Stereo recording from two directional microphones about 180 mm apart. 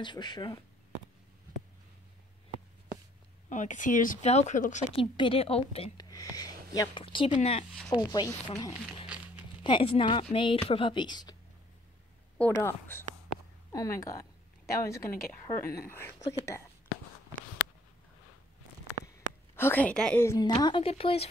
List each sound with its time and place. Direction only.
0.0 s speech: 25° left (ahead or behind)
3.4 s speech: 45° left (ahead or behind)
4.9 s a woman's voice: 30° left (ahead or behind)
6.0 s a woman's voice: 20° left (ahead or behind)
7.9 s speech: 20° left (ahead or behind)
9.0 s crumpling: 5° right (ahead or behind)
9.6 s speech: 25° left (ahead or behind)
12.4 s a woman's voice: 10° left (ahead or behind)
19.1 s a woman's voice: 10° left (ahead or behind); by 21.3 s 30° left (ahead or behind)